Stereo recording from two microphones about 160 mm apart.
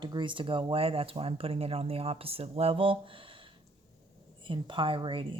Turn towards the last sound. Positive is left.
turn(degrees=-30)  # may be behind; listen again after turning